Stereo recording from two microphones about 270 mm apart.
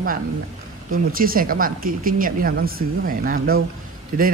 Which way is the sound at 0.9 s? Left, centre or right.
Right.